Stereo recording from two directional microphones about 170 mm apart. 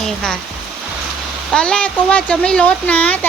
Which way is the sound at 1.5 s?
5° left (ahead or behind).